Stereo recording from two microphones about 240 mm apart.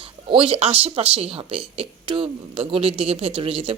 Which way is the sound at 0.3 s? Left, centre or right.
Right.